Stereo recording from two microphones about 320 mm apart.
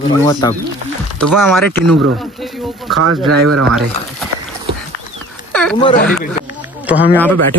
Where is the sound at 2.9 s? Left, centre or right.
Right.